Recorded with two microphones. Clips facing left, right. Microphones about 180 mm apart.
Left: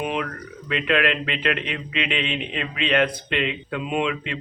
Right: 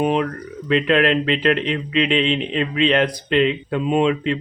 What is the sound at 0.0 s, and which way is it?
Speech, 35° right (ahead or behind).